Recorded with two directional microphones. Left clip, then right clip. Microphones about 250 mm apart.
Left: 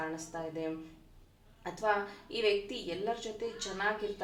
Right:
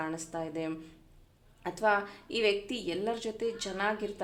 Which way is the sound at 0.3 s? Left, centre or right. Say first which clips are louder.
Right 2 dB; right.